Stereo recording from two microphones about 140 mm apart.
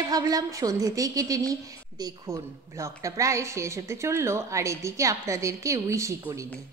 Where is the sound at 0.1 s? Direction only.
25° right (ahead or behind).